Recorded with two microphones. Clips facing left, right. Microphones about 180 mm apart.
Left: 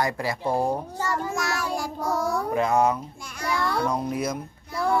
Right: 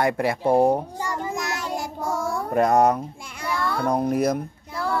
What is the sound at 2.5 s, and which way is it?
Speech, 40° right (ahead or behind).